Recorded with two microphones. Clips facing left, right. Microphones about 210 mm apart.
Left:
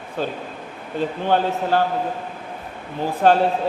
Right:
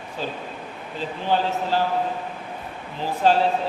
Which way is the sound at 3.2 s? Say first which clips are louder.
Left 3 dB; 55° left (ahead or behind).